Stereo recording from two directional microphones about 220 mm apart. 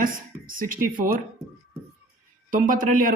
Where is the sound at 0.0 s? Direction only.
40° right (ahead or behind).